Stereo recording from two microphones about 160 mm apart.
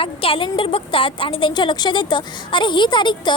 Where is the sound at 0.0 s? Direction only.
35° left (ahead or behind).